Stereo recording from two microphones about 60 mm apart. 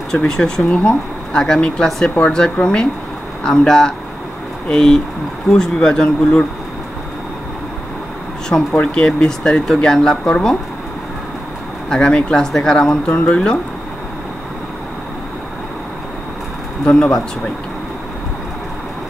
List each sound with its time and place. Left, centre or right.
0.1 s speech: centre
0.7 s speech: left
8.5 s speech: centre
11.9 s speech: centre
16.8 s speech: centre